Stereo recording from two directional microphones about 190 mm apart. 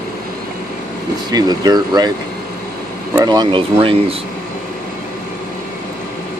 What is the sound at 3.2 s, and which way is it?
Speech, 20° right (ahead or behind).